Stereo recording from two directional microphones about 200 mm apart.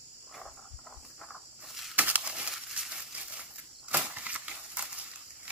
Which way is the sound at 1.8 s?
5° right (ahead or behind).